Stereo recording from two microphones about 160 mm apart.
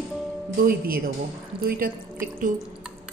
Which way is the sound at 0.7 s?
65° right (ahead or behind).